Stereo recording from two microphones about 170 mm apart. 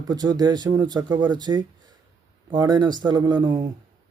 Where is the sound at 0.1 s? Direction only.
25° right (ahead or behind).